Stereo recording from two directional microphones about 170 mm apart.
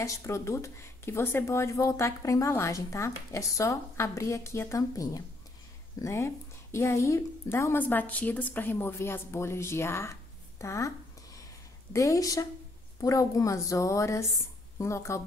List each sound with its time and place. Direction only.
0.0 s a woman's voice: 15° left (ahead or behind)
11.9 s a woman's voice: 20° left (ahead or behind)